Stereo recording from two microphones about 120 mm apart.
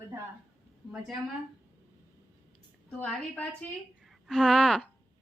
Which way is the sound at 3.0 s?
10° left (ahead or behind).